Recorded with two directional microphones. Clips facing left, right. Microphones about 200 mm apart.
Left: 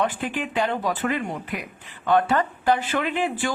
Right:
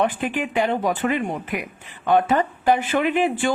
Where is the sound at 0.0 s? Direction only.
20° right (ahead or behind).